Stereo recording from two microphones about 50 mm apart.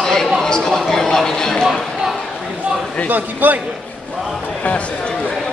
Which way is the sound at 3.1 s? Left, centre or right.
Right.